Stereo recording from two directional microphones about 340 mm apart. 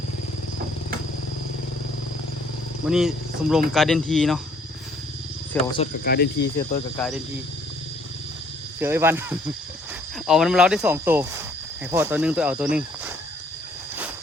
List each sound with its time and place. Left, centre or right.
2.8 s speech: centre
5.7 s speech: left
6.9 s speech: centre
8.8 s speech: centre